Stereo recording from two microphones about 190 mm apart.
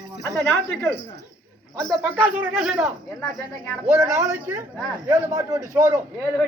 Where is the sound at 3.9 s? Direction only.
15° right (ahead or behind).